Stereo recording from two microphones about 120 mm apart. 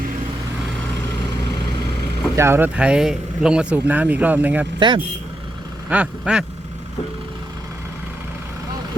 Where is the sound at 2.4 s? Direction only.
20° right (ahead or behind).